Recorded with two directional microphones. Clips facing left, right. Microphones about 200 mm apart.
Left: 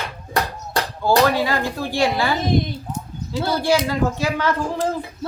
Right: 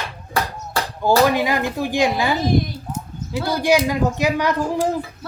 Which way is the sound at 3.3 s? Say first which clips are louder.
Right 1 dB; 15° right (ahead or behind).